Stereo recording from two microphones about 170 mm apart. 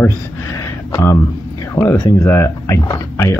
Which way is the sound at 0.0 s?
15° left (ahead or behind).